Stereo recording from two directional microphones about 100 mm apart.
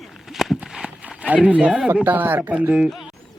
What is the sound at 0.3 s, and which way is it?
Run, 5° right (ahead or behind).